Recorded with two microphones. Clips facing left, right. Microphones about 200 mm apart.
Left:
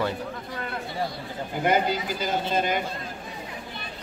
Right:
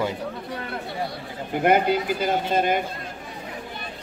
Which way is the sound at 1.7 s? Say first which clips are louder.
Right 4 dB; 55° right (ahead or behind).